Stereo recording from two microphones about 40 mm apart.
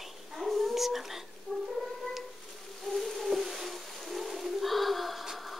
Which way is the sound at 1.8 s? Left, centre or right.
Centre.